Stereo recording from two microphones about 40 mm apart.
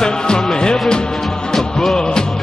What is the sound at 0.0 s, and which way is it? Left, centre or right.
Music, centre.